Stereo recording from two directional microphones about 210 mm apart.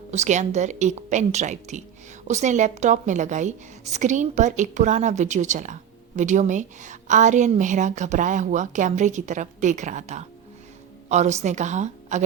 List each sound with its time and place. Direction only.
0.1 s a woman's voice: 35° right (ahead or behind)